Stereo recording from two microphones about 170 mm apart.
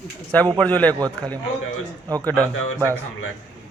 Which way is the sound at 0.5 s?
10° left (ahead or behind).